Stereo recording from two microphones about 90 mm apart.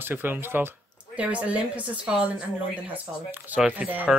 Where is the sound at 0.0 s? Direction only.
20° right (ahead or behind).